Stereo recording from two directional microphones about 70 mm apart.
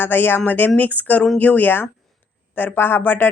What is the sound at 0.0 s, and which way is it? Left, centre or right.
Speech, left.